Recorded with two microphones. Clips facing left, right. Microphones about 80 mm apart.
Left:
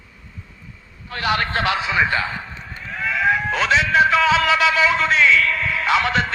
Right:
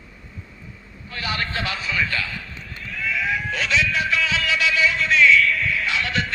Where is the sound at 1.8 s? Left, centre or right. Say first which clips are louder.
Left 5 dB; left.